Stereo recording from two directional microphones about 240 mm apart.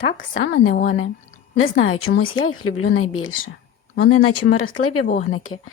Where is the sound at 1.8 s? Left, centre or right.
Left.